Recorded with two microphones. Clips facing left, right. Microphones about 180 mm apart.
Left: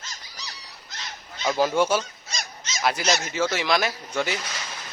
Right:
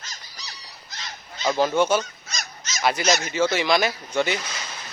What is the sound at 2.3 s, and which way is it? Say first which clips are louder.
Honk: left 1 dB; 30° left (ahead or behind).